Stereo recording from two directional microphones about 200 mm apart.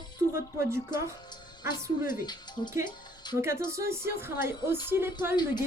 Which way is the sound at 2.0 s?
45° left (ahead or behind).